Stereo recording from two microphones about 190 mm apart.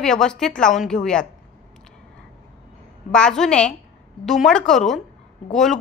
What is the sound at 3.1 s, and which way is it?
A woman's voice, 5° left (ahead or behind).